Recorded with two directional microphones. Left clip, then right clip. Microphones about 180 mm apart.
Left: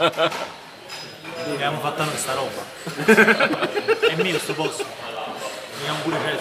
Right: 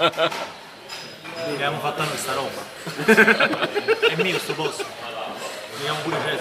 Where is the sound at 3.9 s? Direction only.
20° right (ahead or behind).